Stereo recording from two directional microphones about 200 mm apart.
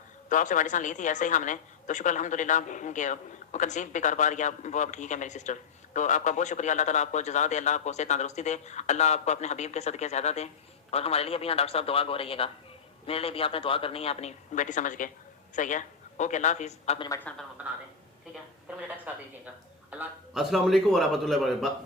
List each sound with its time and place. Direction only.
0.3 s a woman's voice: 40° left (ahead or behind)
17.1 s a woman's voice: 10° left (ahead or behind)
17.6 s a sound: 5° right (ahead or behind)
19.9 s a man's voice: 5° right (ahead or behind)